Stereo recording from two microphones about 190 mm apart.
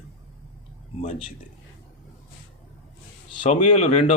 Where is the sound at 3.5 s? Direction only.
30° left (ahead or behind).